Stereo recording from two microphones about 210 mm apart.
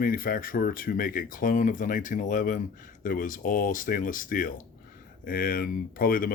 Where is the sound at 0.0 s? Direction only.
45° left (ahead or behind).